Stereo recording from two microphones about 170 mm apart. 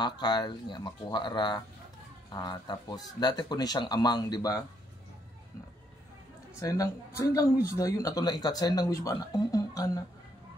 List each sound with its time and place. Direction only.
0.0 s speech: 25° left (ahead or behind)
6.6 s speech: 20° left (ahead or behind)